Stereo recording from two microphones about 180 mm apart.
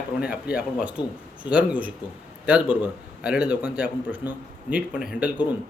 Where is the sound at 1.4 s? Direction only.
5° right (ahead or behind).